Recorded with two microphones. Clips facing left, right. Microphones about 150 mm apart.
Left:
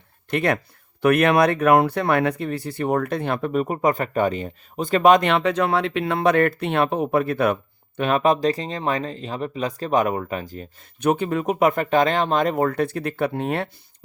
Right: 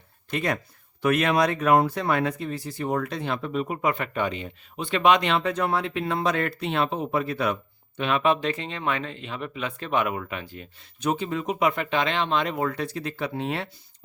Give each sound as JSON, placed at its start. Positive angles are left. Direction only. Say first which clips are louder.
{"t": 0.3, "sound": "speech", "louder": "left 5 dB", "side_deg": 60}
{"t": 5.3, "sound": "speech", "louder": "left 4 dB", "side_deg": 75}
{"t": 11.0, "sound": "speech", "louder": "left 6 dB", "side_deg": 55}